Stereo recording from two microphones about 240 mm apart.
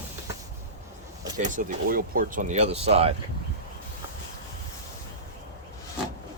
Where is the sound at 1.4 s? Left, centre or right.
Right.